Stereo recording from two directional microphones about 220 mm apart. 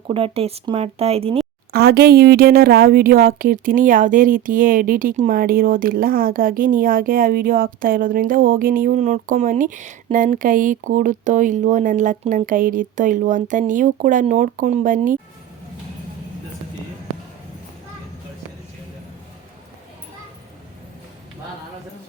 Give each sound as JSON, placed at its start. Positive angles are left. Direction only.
{"t": 0.1, "sound": "speech", "side_deg": -25}
{"t": 1.7, "sound": "a woman's voice", "side_deg": -45}